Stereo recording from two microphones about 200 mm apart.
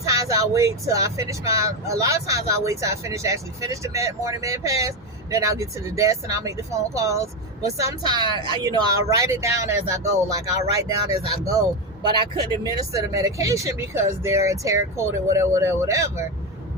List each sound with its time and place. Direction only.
0.0 s speech: 15° right (ahead or behind)
8.3 s a woman's voice: 20° left (ahead or behind)
8.7 s speech: 15° right (ahead or behind)
12.0 s a man's voice: 20° right (ahead or behind)